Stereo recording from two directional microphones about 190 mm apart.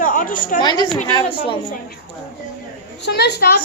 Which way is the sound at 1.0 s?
25° left (ahead or behind).